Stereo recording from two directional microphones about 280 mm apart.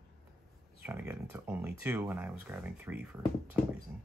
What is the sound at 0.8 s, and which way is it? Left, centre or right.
Speech, centre.